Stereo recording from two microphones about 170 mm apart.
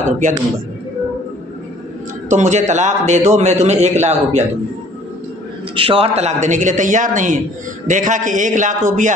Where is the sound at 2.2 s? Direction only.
45° right (ahead or behind).